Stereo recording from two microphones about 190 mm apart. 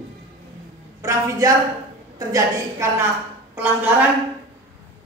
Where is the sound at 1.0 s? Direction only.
15° right (ahead or behind).